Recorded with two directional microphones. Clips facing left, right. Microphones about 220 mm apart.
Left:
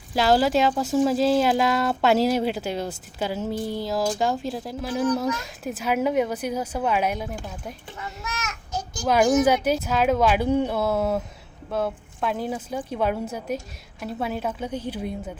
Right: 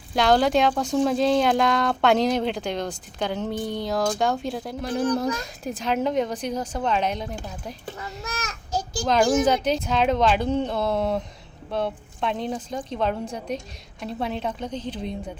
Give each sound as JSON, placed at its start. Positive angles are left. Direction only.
{"t": 0.1, "sound": "a woman's voice", "side_deg": 5}
{"t": 7.9, "sound": "a sound", "side_deg": -35}
{"t": 9.4, "sound": "a woman's voice", "side_deg": 10}